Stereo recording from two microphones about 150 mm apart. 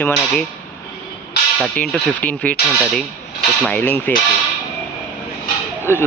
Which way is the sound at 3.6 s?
10° left (ahead or behind).